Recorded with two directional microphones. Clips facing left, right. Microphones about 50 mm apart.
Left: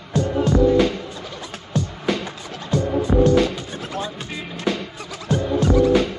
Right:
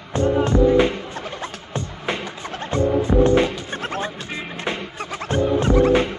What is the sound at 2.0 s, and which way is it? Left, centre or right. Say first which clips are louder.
Music: left 2 dB; right.